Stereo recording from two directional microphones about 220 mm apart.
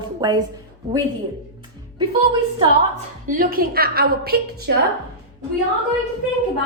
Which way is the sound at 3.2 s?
40° right (ahead or behind).